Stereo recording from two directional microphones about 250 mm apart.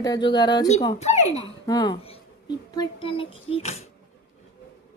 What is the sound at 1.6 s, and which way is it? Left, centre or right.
Speech, centre.